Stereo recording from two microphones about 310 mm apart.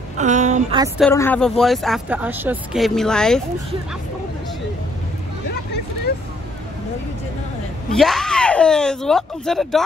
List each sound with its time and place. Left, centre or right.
0.2 s speech: right
0.9 s speech: centre
5.5 s hubbub: left
7.9 s speech: centre